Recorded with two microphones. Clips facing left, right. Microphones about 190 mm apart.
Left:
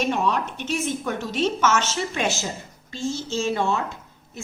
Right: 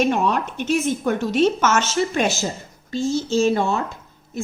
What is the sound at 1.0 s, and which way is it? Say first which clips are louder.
A woman's voice: right 6 dB; 50° right (ahead or behind).